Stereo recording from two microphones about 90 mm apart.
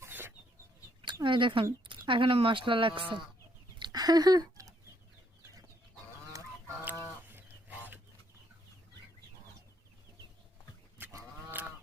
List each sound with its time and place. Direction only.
0.0 s chicken: 25° right (ahead or behind)
1.0 s speech: 65° right (ahead or behind)
3.8 s a sound: 50° right (ahead or behind)
7.3 s goose: 20° right (ahead or behind)
11.1 s goose: 35° right (ahead or behind)